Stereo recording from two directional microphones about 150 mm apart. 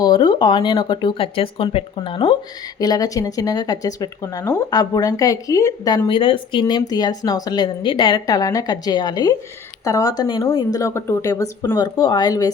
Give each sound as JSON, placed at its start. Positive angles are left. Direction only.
{"t": 0.0, "sound": "speech", "side_deg": 30}
{"t": 2.7, "sound": "speech", "side_deg": 25}
{"t": 11.8, "sound": "speech", "side_deg": 30}